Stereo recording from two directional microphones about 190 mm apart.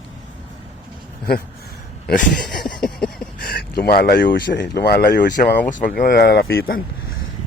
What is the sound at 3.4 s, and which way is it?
Speech, 50° left (ahead or behind).